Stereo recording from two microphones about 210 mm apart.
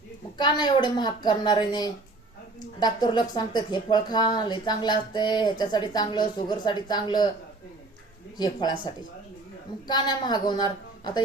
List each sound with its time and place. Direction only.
0.3 s speech: 20° left (ahead or behind)
8.4 s speech: 20° left (ahead or behind)